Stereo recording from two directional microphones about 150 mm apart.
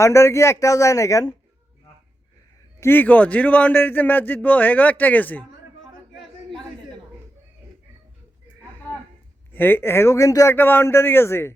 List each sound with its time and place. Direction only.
0.0 s a man's voice: 20° left (ahead or behind)
2.8 s speech: 15° left (ahead or behind)
9.5 s speech: 15° left (ahead or behind)